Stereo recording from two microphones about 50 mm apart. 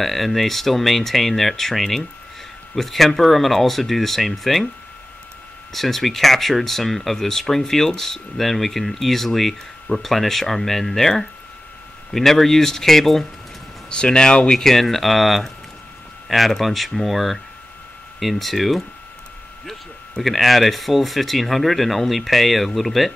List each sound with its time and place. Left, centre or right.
0.0 s speech: centre
5.7 s speech: centre
13.8 s speech: centre
14.7 s speech: centre